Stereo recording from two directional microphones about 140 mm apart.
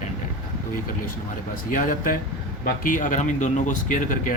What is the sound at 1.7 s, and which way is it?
Speech, 75° left (ahead or behind).